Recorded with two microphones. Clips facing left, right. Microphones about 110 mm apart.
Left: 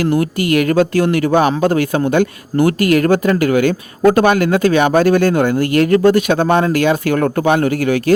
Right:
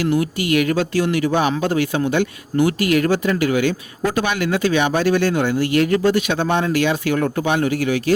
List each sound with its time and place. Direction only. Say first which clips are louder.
0.0 s speech: left 4 dB; 50° left (ahead or behind)